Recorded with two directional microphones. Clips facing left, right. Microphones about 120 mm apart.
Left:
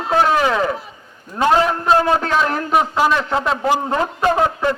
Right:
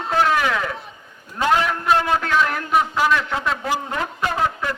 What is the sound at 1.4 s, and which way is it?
A man's voice, 30° left (ahead or behind).